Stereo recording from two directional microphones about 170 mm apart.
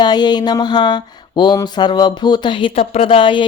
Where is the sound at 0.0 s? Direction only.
25° left (ahead or behind).